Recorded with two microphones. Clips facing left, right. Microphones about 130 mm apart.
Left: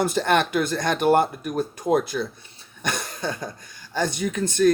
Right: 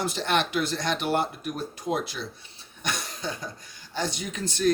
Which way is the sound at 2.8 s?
55° left (ahead or behind).